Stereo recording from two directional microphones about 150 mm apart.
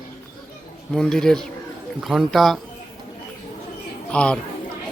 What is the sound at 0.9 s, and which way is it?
Speech, 5° left (ahead or behind).